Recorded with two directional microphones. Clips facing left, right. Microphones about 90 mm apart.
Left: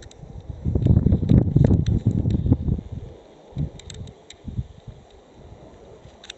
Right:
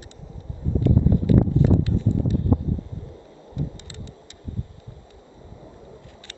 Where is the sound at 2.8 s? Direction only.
15° right (ahead or behind).